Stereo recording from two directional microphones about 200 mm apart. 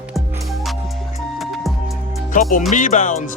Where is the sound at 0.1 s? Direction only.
Centre (ahead or behind).